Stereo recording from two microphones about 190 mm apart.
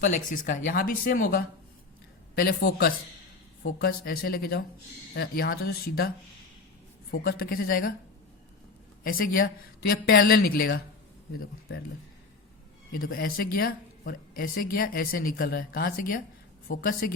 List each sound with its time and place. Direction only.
0.0 s a man's voice: 45° left (ahead or behind)
7.1 s speech: 55° left (ahead or behind)
9.0 s speech: 50° left (ahead or behind)
12.9 s speech: 50° left (ahead or behind)